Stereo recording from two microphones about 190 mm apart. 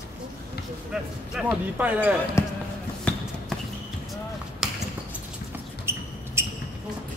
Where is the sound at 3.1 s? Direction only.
5° left (ahead or behind).